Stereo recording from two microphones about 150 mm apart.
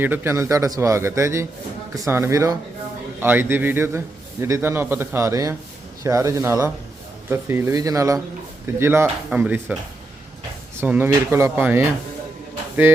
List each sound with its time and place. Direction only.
0.0 s a man's voice: 15° right (ahead or behind)
10.8 s a man's voice: 15° right (ahead or behind)